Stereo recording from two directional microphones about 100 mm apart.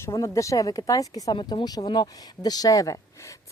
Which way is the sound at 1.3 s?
55° left (ahead or behind).